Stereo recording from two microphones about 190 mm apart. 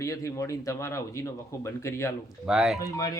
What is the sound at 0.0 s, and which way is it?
A man's voice, 15° left (ahead or behind).